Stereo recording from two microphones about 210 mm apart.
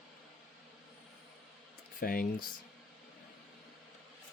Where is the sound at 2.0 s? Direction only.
45° left (ahead or behind).